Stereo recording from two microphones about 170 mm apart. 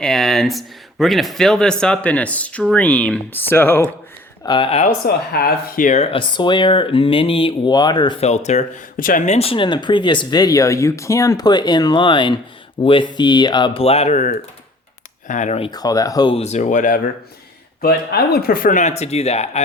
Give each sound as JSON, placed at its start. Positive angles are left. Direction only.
{"t": 0.0, "sound": "speech", "side_deg": 0}
{"t": 4.4, "sound": "speech", "side_deg": 30}
{"t": 5.0, "sound": "speech", "side_deg": 65}
{"t": 8.2, "sound": "speech", "side_deg": 40}
{"t": 15.7, "sound": "speech", "side_deg": 20}
{"t": 16.3, "sound": "speech", "side_deg": 40}
{"t": 17.8, "sound": "speech", "side_deg": 65}